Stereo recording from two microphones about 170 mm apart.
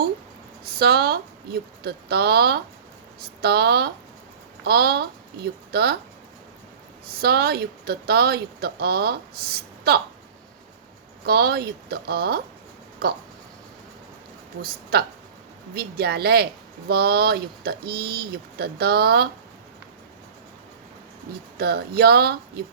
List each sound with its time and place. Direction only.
0.6 s speech: 70° right (ahead or behind)
7.2 s speech: 65° right (ahead or behind)
11.3 s speech: 70° right (ahead or behind)
14.6 s speech: 65° right (ahead or behind)
21.6 s speech: 70° right (ahead or behind)